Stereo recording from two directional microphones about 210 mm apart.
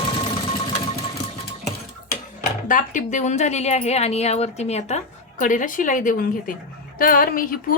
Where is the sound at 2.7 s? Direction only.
40° left (ahead or behind).